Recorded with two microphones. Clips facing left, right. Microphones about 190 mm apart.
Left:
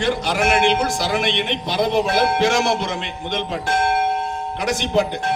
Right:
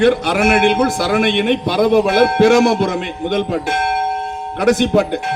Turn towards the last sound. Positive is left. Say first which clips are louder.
# right 6 dB
turn(degrees=-55)  # may be behind; listen again after turning